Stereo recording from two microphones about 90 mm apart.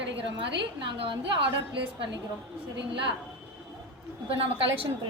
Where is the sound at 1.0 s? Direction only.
70° right (ahead or behind).